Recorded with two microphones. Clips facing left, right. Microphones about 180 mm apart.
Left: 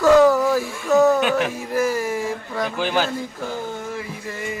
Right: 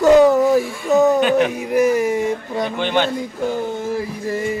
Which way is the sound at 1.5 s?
20° right (ahead or behind).